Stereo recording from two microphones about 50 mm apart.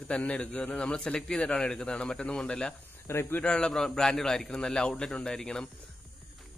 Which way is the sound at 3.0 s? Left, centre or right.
Left.